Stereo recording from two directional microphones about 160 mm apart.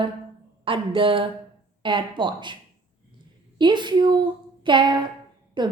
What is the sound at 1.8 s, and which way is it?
Speech, 30° right (ahead or behind).